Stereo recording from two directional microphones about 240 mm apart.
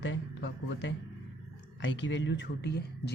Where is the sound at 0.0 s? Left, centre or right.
Left.